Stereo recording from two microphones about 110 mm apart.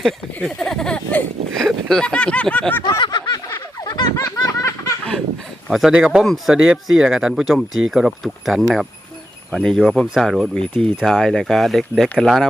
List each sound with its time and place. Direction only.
0.4 s speech: 5° left (ahead or behind)
3.0 s a sound: 45° left (ahead or behind); by 4.9 s 30° left (ahead or behind)
5.6 s speech: 5° right (ahead or behind)